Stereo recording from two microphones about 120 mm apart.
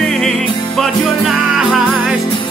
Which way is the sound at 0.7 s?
Centre (ahead or behind).